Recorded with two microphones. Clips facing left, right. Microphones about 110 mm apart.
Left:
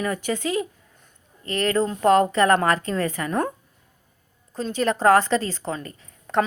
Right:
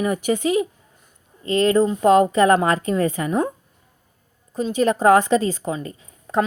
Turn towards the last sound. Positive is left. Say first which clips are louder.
# right 1 dB
turn(degrees=-15)  # may be behind; listen again after turning